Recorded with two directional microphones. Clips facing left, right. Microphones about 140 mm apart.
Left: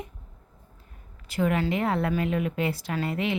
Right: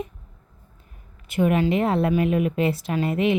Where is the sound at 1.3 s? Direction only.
20° right (ahead or behind).